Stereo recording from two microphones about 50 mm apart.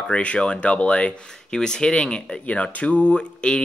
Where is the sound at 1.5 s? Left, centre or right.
Centre.